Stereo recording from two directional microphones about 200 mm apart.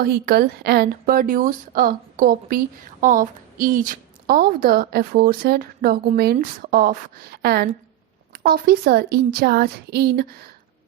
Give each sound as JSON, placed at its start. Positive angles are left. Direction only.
{"t": 0.0, "sound": "speech", "side_deg": -50}